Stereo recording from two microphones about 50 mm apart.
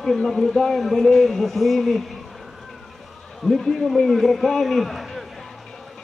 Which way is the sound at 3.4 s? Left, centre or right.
Centre.